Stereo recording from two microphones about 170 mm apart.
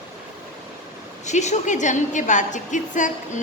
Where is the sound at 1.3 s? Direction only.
40° left (ahead or behind).